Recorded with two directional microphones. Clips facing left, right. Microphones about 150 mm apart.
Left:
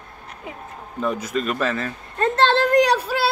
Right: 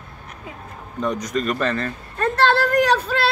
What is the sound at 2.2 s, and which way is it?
A woman's voice, 20° left (ahead or behind).